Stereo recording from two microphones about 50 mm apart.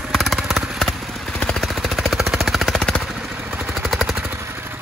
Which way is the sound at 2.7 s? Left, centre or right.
Centre.